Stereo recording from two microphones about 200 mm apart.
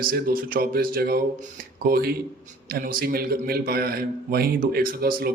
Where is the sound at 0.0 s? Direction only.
45° right (ahead or behind).